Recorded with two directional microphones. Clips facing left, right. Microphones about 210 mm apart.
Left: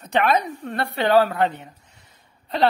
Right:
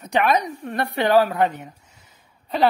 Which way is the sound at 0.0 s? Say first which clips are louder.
Even; 15° right (ahead or behind).